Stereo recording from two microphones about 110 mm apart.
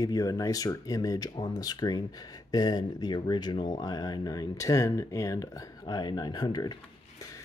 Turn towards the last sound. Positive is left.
turn(degrees=40)  # may be behind; listen again after turning